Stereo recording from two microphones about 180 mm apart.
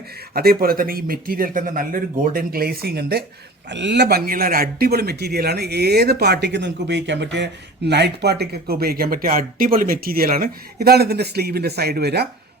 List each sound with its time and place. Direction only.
0.3 s speech: 55° right (ahead or behind)
3.7 s speech: 75° right (ahead or behind)